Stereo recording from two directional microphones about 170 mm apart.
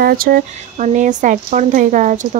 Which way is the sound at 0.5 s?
45° right (ahead or behind).